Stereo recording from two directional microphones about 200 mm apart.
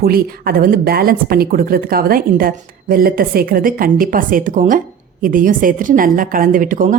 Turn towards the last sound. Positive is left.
turn(degrees=-40)  # may be behind; listen again after turning